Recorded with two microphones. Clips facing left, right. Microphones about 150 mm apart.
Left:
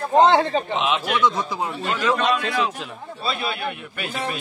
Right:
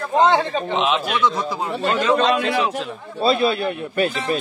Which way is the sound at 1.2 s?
15° left (ahead or behind).